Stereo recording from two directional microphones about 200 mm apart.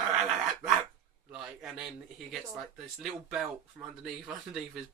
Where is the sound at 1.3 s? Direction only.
Centre (ahead or behind).